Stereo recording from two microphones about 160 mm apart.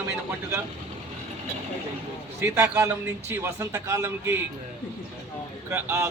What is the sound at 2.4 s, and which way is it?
A man's voice, 15° right (ahead or behind).